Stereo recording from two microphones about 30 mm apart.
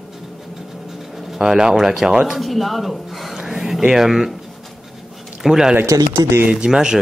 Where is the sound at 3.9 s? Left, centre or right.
Centre.